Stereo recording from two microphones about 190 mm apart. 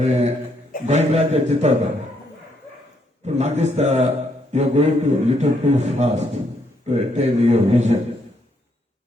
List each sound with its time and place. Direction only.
0.0 s a man's voice: 35° right (ahead or behind)
3.2 s a man's voice: 35° right (ahead or behind)